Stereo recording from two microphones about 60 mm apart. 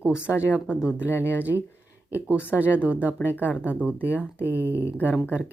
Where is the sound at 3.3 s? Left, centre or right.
Left.